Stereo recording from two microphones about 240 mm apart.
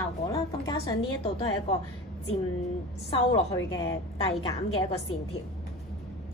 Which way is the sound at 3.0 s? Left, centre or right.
Left.